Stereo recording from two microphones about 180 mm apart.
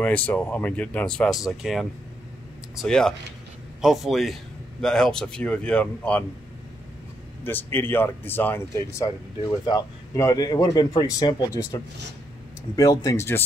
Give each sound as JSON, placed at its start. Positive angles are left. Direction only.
{"t": 0.0, "sound": "speech", "side_deg": 10}
{"t": 7.4, "sound": "speech", "side_deg": 10}